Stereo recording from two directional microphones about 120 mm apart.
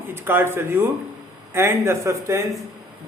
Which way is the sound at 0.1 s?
20° right (ahead or behind).